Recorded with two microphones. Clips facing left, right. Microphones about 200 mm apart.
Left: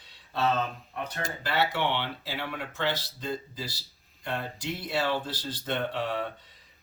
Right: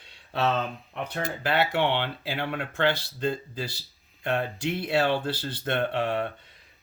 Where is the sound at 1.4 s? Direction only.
60° right (ahead or behind).